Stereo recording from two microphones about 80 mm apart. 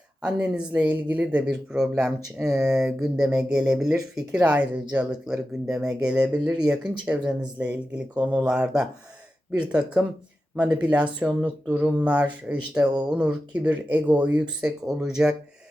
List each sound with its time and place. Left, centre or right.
0.3 s speech: centre
1.7 s speech: centre